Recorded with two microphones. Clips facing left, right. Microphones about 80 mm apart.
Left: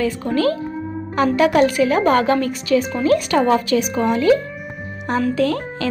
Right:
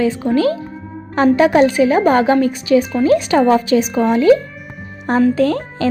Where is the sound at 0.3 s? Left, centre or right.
Right.